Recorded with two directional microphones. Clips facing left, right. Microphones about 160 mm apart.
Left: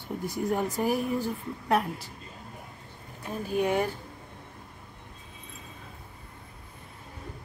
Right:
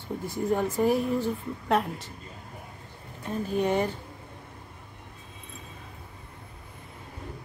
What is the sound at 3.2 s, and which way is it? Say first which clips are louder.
Speech: right 1 dB; 5° left (ahead or behind).